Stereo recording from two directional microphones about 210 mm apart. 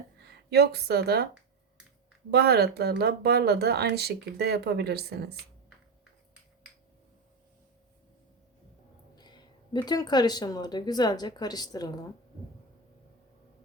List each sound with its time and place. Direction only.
0.2 s speech: 50° right (ahead or behind)
2.3 s speech: 50° right (ahead or behind)
9.1 s speech: 20° left (ahead or behind)